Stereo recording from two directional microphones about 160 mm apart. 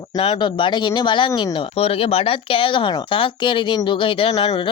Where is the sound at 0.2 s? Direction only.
35° left (ahead or behind).